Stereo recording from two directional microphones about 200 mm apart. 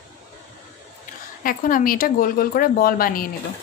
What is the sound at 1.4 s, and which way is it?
Speech, 45° left (ahead or behind).